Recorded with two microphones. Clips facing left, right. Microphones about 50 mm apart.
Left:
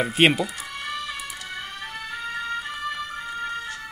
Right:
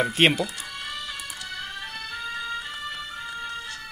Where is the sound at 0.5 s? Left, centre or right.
Left.